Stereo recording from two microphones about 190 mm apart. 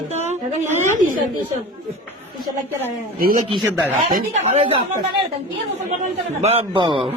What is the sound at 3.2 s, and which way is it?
Speech, 45° right (ahead or behind).